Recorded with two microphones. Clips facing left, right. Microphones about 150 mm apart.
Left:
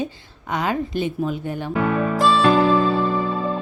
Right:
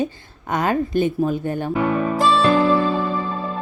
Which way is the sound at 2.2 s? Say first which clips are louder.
Even; centre (ahead or behind).